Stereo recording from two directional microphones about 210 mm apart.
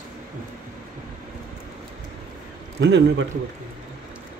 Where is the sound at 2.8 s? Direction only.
60° right (ahead or behind).